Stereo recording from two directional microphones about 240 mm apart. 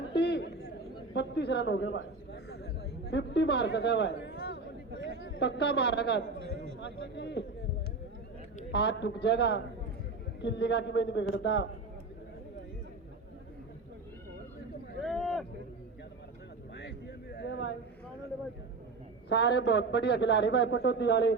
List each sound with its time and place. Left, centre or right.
0.0 s a sound: left
1.1 s a man's voice: left
8.7 s a man's voice: left
15.0 s a sound: centre
17.3 s speech: left
19.3 s a man's voice: left